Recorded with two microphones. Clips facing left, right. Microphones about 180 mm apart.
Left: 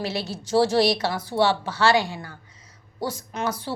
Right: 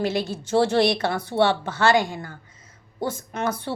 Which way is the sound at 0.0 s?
50° right (ahead or behind).